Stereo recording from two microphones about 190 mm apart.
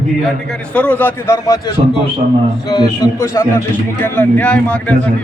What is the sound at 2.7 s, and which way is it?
A man's voice, 20° left (ahead or behind).